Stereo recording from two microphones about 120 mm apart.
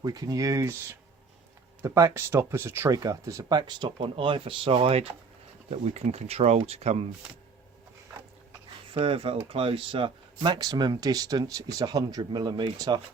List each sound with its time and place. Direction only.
0.0 s speech: 35° right (ahead or behind)
1.8 s speech: 25° right (ahead or behind)
3.7 s speech: 40° right (ahead or behind)
5.7 s speech: 65° right (ahead or behind)
8.9 s speech: 45° right (ahead or behind)